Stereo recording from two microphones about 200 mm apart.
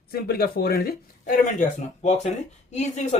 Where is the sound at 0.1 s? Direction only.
50° left (ahead or behind).